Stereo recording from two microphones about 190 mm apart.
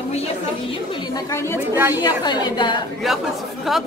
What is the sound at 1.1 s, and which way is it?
Speech, 15° left (ahead or behind).